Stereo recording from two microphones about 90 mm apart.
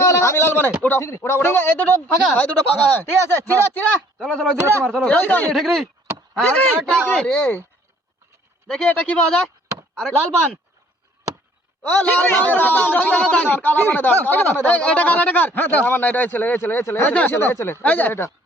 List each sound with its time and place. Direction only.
0.0 s a sound: 35° left (ahead or behind)
0.8 s speech: 25° left (ahead or behind)
4.2 s speech: 5° left (ahead or behind); by 5.5 s 20° left (ahead or behind)
5.5 s speech: centre (ahead or behind)
6.3 s speech: 10° left (ahead or behind)
8.6 s speech: 10° left (ahead or behind)
10.0 s speech: 5° left (ahead or behind)
11.8 s speech: 20° left (ahead or behind)
17.8 s speech: 20° left (ahead or behind)